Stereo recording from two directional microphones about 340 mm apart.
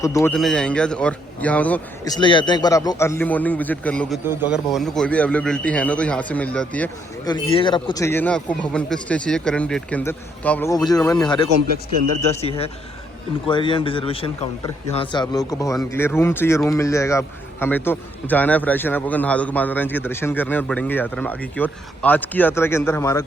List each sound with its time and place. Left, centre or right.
0.0 s a man's voice: centre